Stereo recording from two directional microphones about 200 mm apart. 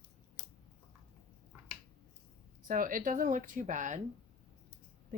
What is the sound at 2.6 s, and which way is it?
Speech, 45° right (ahead or behind).